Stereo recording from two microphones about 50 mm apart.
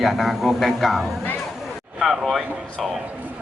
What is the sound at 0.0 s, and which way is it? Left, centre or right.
Speech, centre.